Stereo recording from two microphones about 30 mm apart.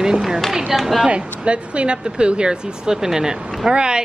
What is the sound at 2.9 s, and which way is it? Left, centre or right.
Speech, centre.